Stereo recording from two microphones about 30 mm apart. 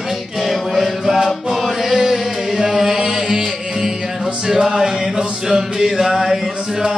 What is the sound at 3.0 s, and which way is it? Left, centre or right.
Music, right.